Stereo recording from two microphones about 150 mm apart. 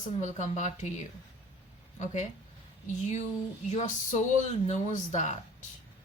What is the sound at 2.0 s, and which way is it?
Speech, 50° left (ahead or behind).